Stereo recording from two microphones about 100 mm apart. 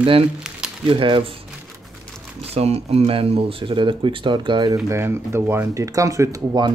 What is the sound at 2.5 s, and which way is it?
Speech, 90° right.